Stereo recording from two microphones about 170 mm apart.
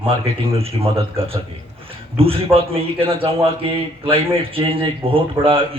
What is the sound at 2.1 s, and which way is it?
A man's voice, 35° right (ahead or behind).